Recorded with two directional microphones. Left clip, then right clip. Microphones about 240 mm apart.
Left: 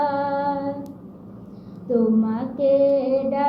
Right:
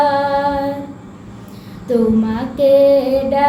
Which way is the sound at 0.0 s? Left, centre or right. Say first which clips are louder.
Right 8 dB; centre.